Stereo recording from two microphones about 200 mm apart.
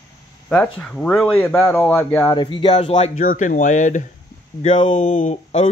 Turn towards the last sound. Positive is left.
turn(degrees=35)  # may be behind; listen again after turning